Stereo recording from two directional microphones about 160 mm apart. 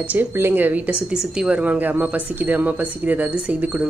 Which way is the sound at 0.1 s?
10° right (ahead or behind).